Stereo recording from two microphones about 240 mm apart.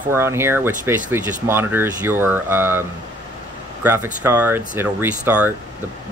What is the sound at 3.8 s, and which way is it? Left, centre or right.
Speech, centre.